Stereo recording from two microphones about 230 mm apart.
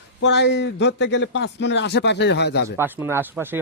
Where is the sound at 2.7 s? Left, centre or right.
Centre.